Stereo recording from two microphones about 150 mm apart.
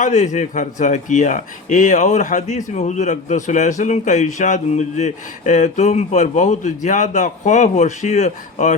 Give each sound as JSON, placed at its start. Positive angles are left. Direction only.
{"t": 0.0, "sound": "a man's voice", "side_deg": 55}